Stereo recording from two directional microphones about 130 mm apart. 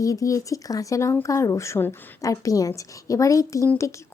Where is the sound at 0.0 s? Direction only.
25° left (ahead or behind).